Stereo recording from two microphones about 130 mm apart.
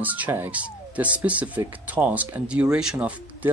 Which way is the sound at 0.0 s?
15° right (ahead or behind).